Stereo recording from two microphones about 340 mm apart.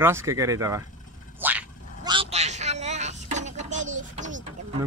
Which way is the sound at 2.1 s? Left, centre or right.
Centre.